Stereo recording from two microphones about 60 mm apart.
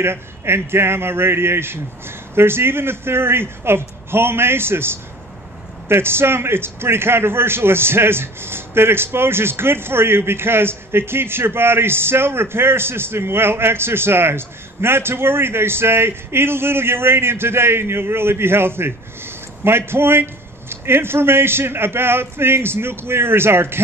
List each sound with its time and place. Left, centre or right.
0.0 s a man's voice: right